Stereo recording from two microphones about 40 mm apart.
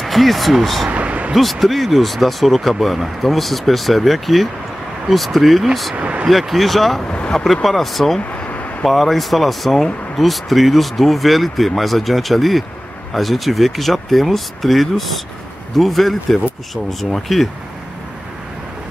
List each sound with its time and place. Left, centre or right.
0.0 s speech: centre
0.8 s a sound: right
1.3 s speech: centre
5.9 s speech: right
6.2 s speech: centre
7.1 s vehicle: left
7.6 s speech: centre
8.4 s a sound: left
8.8 s speech: centre